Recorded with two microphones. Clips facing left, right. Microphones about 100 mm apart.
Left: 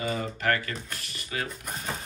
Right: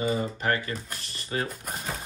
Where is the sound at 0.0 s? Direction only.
25° right (ahead or behind).